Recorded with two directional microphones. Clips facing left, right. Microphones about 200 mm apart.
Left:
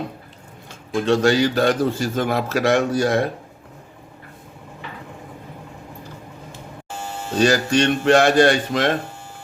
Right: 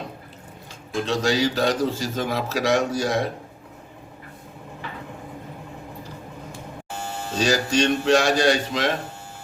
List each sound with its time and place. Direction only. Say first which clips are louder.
1.0 s a man's voice: left 5 dB; 55° left (ahead or behind)
7.3 s a man's voice: left 4 dB; 55° left (ahead or behind)